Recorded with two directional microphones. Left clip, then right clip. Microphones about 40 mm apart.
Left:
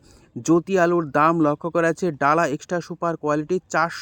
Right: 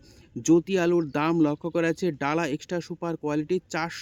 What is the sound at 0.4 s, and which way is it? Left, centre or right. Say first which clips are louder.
Speech: left 4 dB; left.